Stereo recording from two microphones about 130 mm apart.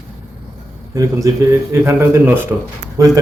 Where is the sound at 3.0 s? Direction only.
25° right (ahead or behind).